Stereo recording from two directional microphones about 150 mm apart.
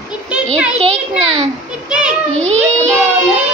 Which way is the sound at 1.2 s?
40° right (ahead or behind).